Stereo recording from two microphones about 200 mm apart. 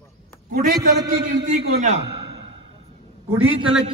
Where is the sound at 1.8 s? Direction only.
30° right (ahead or behind).